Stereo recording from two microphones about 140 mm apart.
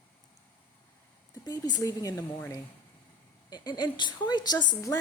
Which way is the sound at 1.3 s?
30° left (ahead or behind).